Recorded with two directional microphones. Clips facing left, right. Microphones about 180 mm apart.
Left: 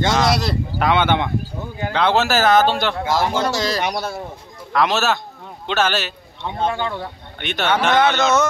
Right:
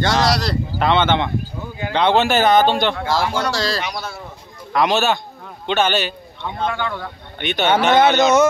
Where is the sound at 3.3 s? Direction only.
20° left (ahead or behind).